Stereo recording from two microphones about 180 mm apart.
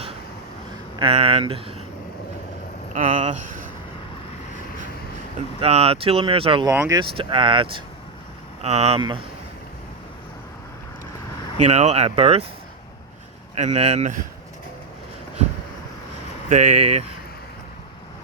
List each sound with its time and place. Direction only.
0.9 s speech: 30° right (ahead or behind)
2.9 s speech: 45° right (ahead or behind)
5.5 s speech: 35° right (ahead or behind)
6.7 s speech: 15° right (ahead or behind)
7.0 s speech: 30° right (ahead or behind)
11.5 s speech: 35° right (ahead or behind)
13.6 s speech: 40° right (ahead or behind)
16.5 s speech: 40° right (ahead or behind)